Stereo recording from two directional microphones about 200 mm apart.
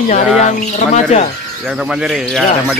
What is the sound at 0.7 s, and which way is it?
Speech, 35° left (ahead or behind).